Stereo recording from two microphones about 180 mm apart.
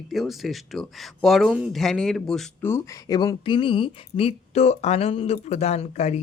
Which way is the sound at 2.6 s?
15° left (ahead or behind).